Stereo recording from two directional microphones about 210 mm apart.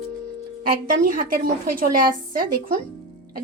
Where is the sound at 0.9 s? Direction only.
40° right (ahead or behind).